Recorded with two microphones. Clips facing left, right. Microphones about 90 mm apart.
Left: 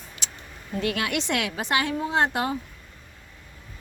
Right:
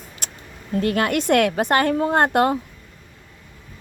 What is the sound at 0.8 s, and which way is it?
A woman's voice, 45° right (ahead or behind).